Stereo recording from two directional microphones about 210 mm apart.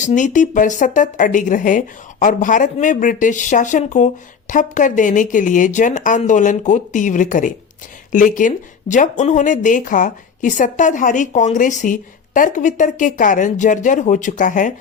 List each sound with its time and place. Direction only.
0.0 s speech: 35° left (ahead or behind)